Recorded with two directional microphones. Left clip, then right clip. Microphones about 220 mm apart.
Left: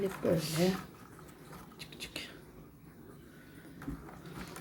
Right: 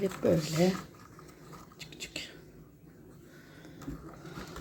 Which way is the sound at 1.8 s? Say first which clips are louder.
Right 2 dB; 10° right (ahead or behind).